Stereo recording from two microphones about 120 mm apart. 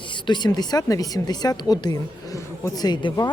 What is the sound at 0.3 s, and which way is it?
Speech, 35° left (ahead or behind).